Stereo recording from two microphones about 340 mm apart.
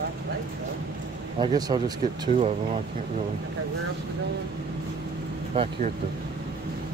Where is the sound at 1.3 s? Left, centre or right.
Centre.